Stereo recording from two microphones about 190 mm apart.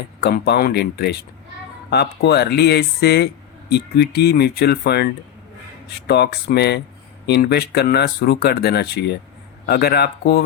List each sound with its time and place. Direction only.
0.2 s speech: 60° left (ahead or behind)